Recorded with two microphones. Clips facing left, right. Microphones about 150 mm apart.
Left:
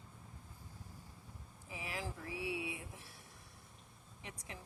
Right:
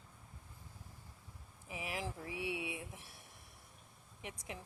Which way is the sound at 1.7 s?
20° right (ahead or behind).